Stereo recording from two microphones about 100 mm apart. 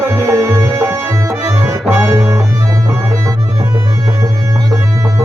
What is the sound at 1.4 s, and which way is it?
Accordion, 20° right (ahead or behind).